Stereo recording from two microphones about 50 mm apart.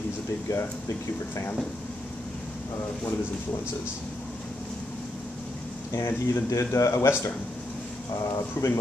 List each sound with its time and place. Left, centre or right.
0.5 s speech: left
5.9 s speech: left
6.5 s speech: left
8.1 s speech: left